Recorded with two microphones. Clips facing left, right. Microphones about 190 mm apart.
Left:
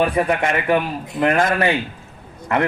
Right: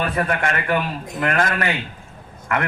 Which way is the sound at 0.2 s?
20° left (ahead or behind).